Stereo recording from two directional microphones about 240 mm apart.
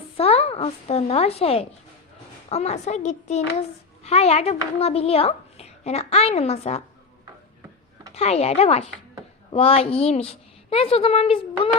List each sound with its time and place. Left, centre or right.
0.2 s a woman's voice: left
8.1 s a woman's voice: left